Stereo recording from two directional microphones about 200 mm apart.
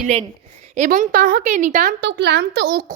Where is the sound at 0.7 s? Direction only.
40° right (ahead or behind).